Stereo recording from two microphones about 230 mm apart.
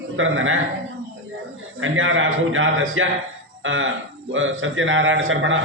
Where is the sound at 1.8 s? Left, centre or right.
Right.